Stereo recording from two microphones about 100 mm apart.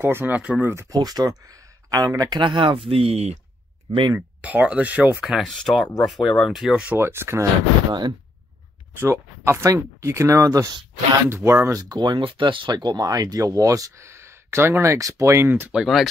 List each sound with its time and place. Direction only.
0.0 s speech: 20° right (ahead or behind)
0.8 s speech: 40° right (ahead or behind)
2.4 s speech: 55° right (ahead or behind); by 3.3 s 90° right
4.4 s speech: 15° right (ahead or behind)
5.3 s speech: 5° left (ahead or behind)
7.0 s speech: 25° right (ahead or behind)
8.9 s speech: 25° right (ahead or behind)
11.8 s speech: 45° right (ahead or behind); by 15.7 s 20° right (ahead or behind)
15.7 s speech: 5° right (ahead or behind)